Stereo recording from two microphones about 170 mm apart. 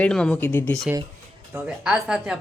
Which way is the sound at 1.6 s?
5° right (ahead or behind).